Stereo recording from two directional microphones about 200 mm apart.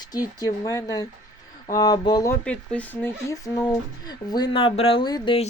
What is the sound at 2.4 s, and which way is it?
Speech, 5° left (ahead or behind).